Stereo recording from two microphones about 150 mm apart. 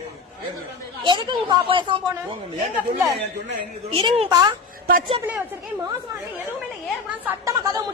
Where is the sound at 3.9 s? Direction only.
40° right (ahead or behind).